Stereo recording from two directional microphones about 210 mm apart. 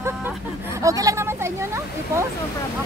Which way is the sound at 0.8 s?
15° right (ahead or behind).